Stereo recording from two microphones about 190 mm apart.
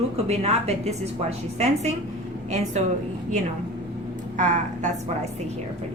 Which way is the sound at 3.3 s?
40° right (ahead or behind).